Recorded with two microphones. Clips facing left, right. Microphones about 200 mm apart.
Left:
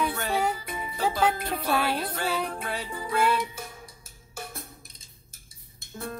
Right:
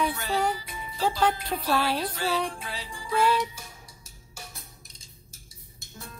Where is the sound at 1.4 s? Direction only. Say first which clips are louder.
Even; 55° left (ahead or behind).